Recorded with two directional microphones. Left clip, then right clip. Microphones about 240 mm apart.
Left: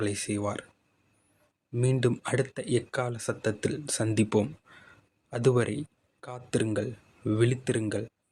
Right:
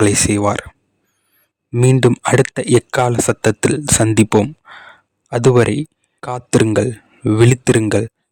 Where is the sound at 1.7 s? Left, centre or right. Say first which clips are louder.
Right 14 dB; right.